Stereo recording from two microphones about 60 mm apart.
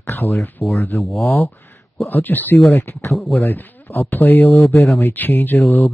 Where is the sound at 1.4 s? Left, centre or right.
Left.